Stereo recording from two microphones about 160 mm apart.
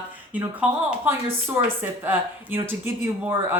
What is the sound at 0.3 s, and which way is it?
Speech, 10° right (ahead or behind).